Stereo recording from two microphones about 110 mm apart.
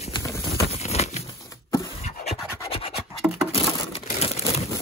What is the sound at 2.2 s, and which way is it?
Rub, 90° left.